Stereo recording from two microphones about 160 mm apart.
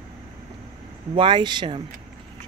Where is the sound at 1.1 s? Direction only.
30° right (ahead or behind).